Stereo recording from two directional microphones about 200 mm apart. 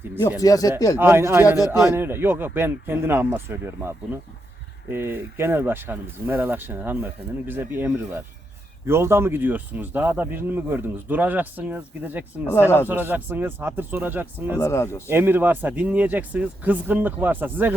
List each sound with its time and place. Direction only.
0.2 s speech: 20° left (ahead or behind)
0.9 s speech: 10° right (ahead or behind)
1.5 s a man's voice: 20° left (ahead or behind)
1.8 s speech: 10° right (ahead or behind)
12.5 s speech: 10° left (ahead or behind)
12.9 s speech: 10° right (ahead or behind)
14.6 s speech: 15° left (ahead or behind)
15.1 s speech: 10° right (ahead or behind)